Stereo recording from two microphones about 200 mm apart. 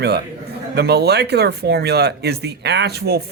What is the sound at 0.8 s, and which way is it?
Speech, 55° right (ahead or behind).